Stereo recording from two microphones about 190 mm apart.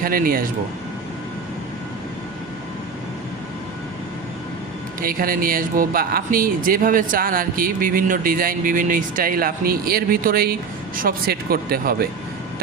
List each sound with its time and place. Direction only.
0.0 s speech: 50° right (ahead or behind)
4.9 s speech: 50° right (ahead or behind)